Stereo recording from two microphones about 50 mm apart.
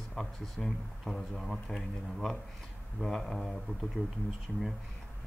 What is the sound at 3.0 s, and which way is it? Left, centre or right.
Speech, centre.